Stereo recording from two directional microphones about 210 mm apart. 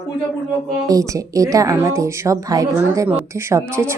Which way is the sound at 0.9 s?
15° right (ahead or behind).